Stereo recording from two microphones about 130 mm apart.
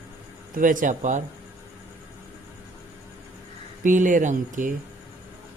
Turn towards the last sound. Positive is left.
turn(degrees=-80)